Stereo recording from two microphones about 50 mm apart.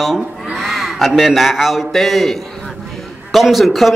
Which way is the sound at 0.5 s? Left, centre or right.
Centre.